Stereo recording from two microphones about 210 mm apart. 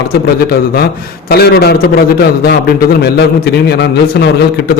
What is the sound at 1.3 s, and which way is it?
A man's voice, 50° left (ahead or behind).